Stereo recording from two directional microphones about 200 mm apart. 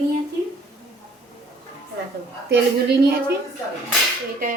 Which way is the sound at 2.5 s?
55° right (ahead or behind).